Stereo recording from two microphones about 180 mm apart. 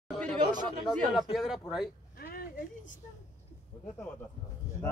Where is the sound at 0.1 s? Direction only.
10° left (ahead or behind).